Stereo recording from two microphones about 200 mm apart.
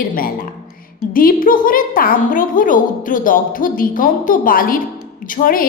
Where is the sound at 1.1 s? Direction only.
45° left (ahead or behind).